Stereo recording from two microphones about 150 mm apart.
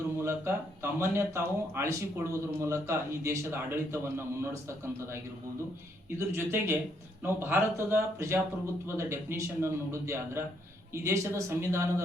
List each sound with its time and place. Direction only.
0.2 s speech: 15° right (ahead or behind)
6.1 s speech: 15° right (ahead or behind)